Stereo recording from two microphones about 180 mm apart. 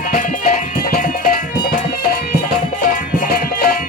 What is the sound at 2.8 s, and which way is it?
Music, 45° left (ahead or behind).